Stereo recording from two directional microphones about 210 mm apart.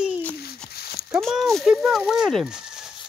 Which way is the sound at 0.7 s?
50° left (ahead or behind).